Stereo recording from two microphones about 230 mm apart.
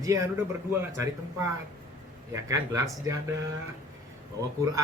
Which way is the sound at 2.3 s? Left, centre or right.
Centre.